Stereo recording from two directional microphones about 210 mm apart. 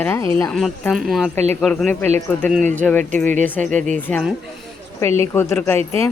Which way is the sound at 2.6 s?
35° right (ahead or behind).